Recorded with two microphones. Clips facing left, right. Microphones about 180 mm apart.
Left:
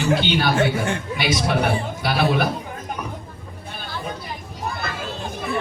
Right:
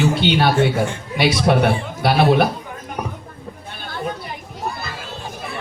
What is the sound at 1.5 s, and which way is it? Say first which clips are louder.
Speech: right 7 dB; 50° right (ahead or behind).